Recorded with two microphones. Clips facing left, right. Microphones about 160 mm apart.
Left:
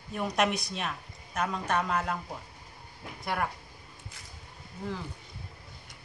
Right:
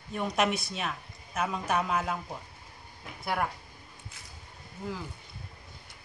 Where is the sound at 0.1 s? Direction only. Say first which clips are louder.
Even; centre (ahead or behind).